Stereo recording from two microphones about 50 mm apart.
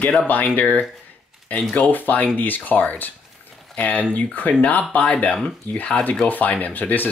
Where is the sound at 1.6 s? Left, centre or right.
Centre.